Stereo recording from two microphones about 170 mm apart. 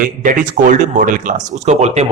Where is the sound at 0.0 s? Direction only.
50° right (ahead or behind).